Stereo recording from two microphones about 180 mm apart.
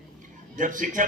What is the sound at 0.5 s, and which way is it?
Speech, 45° right (ahead or behind).